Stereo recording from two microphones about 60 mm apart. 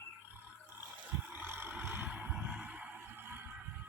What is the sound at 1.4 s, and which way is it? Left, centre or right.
Vehicle, right.